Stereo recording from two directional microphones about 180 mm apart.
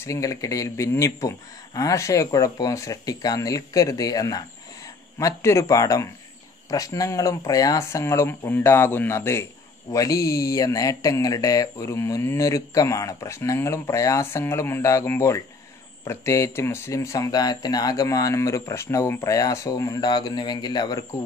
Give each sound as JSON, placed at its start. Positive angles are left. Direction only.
{"t": 0.0, "sound": "speech", "side_deg": 20}